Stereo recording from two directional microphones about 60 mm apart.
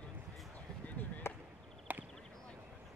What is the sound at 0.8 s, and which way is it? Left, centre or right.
Chop, left.